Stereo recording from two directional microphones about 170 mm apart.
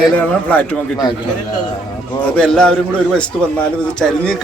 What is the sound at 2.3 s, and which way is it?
Speech, 5° left (ahead or behind).